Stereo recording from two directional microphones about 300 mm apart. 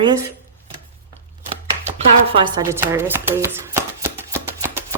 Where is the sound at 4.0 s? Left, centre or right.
Centre.